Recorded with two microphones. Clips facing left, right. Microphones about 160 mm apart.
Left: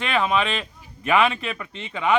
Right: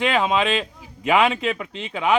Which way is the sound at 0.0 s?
15° right (ahead or behind).